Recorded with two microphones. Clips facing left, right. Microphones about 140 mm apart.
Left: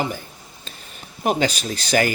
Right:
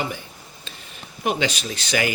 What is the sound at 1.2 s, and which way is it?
Speech, 40° left (ahead or behind).